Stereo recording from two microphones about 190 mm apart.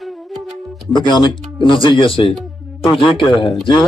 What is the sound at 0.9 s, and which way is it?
A man's voice, 25° left (ahead or behind).